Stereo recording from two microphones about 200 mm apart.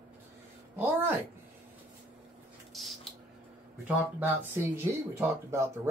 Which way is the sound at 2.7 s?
Centre (ahead or behind).